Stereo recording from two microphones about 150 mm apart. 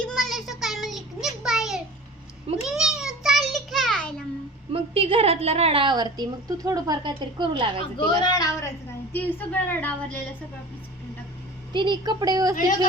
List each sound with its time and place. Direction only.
0.0 s a sound: centre (ahead or behind)
0.6 s child singing: centre (ahead or behind)
2.6 s a sound: 5° right (ahead or behind)
4.7 s a woman's voice: 40° right (ahead or behind)
7.9 s speech: 30° left (ahead or behind)
9.1 s a woman's voice: 10° left (ahead or behind)
11.7 s a woman's voice: 30° right (ahead or behind)